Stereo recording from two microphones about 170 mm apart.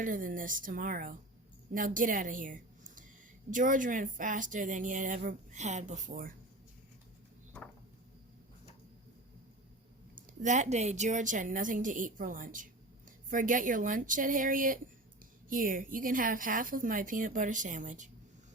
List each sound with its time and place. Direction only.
0.0 s a woman's voice: 55° right (ahead or behind)
10.2 s a woman's voice: 45° right (ahead or behind)